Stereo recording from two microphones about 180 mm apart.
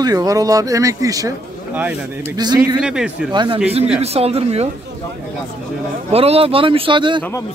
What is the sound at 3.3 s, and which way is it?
Speech, 25° right (ahead or behind).